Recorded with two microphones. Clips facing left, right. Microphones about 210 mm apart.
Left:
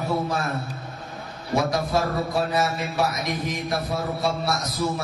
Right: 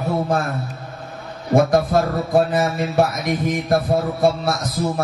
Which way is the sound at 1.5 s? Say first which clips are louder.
Right 7 dB; 50° right (ahead or behind).